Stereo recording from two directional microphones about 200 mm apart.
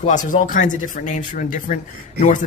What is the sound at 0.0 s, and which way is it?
Speech, 35° left (ahead or behind).